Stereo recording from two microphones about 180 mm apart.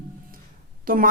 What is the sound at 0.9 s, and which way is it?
Speech, 50° right (ahead or behind).